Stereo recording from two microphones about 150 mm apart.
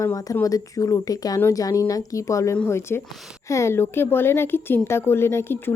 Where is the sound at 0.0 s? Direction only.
20° left (ahead or behind).